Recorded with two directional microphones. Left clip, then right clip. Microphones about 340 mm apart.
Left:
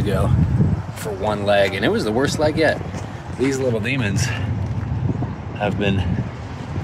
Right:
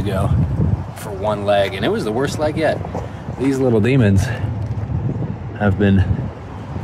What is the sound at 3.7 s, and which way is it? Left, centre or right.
Speech, right.